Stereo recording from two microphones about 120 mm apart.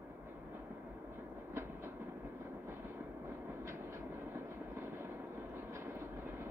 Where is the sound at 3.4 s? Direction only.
20° right (ahead or behind).